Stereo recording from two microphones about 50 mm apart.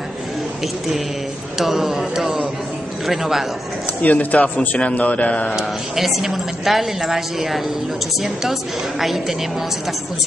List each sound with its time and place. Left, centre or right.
1.6 s speech: centre
4.0 s speech: left
5.6 s speech: centre